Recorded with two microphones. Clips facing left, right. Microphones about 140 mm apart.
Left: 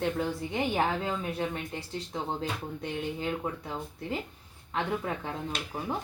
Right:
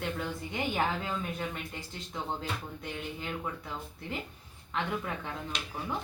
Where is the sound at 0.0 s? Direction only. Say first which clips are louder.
Left 5 dB; 35° left (ahead or behind).